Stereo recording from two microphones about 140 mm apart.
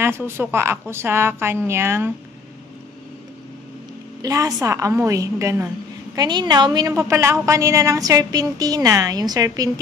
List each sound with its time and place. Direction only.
0.4 s a woman's voice: 15° right (ahead or behind)
4.2 s a woman's voice: 25° right (ahead or behind)
6.1 s a woman's voice: 30° right (ahead or behind)